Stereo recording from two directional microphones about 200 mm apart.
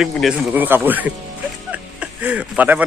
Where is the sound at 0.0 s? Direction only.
Centre (ahead or behind).